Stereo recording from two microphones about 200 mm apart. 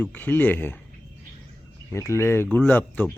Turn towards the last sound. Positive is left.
turn(degrees=10)  # may be behind; listen again after turning